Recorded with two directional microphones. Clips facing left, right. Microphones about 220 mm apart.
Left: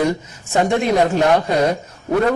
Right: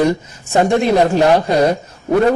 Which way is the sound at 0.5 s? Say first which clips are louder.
Right 3 dB; 30° right (ahead or behind).